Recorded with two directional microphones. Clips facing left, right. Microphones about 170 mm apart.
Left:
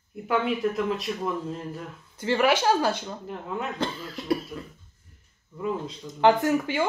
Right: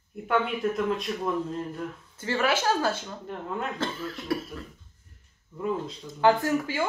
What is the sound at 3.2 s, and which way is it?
Speech, 5° left (ahead or behind).